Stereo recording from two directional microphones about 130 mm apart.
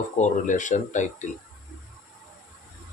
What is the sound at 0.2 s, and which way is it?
Speech, 75° left (ahead or behind).